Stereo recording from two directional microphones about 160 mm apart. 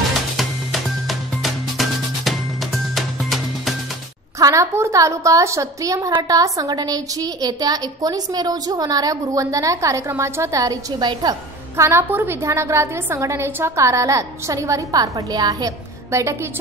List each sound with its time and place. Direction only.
0.4 s music: centre (ahead or behind)
4.4 s a woman's voice: 20° right (ahead or behind)